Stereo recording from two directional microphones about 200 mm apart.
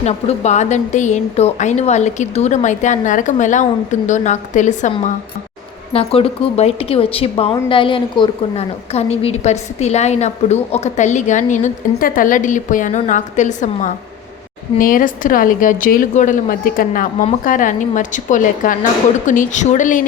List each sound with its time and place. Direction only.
0.0 s a woman's voice: 35° left (ahead or behind)